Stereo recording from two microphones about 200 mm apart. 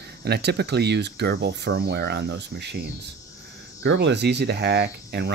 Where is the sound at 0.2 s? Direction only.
55° right (ahead or behind).